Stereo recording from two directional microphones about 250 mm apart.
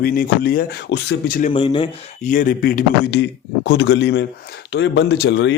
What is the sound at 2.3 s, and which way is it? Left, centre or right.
A man's voice, left.